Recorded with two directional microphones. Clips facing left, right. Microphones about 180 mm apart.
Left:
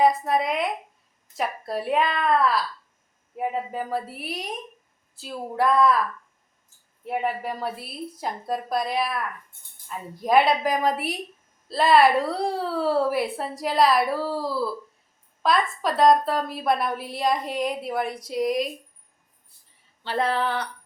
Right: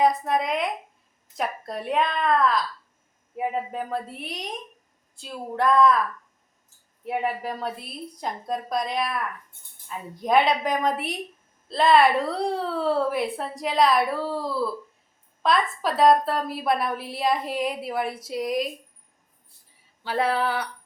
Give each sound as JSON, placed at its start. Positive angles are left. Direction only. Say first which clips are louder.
{"t": 0.0, "sound": "a woman's voice", "louder": "left 1 dB", "side_deg": 0}
{"t": 7.0, "sound": "a woman's voice", "louder": "even", "side_deg": 0}
{"t": 20.1, "sound": "a woman's voice", "louder": "right 1 dB", "side_deg": -5}